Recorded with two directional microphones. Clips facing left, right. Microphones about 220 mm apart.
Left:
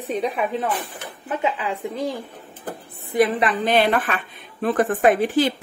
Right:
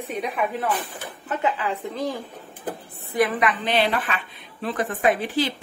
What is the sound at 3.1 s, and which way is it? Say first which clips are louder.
Speech: left 3 dB; 25° left (ahead or behind).